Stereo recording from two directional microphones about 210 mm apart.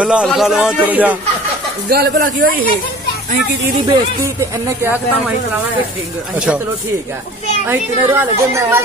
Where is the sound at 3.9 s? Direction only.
15° right (ahead or behind).